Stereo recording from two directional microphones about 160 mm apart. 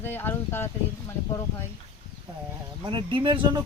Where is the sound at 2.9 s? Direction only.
30° right (ahead or behind).